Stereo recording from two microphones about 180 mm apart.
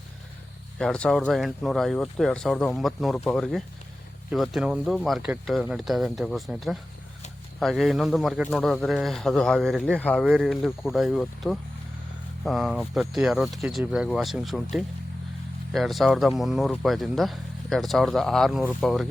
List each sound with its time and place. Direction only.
0.8 s speech: 5° left (ahead or behind)